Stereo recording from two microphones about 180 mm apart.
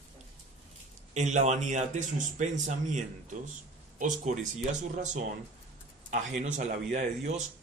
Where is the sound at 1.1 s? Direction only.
40° right (ahead or behind).